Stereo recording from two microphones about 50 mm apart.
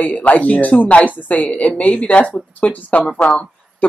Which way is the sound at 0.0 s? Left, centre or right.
Left.